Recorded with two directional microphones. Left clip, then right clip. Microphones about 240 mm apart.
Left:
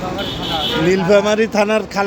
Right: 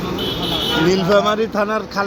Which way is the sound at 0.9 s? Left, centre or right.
Left.